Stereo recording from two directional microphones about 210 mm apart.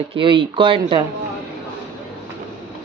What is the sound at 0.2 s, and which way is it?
Speech, 25° right (ahead or behind).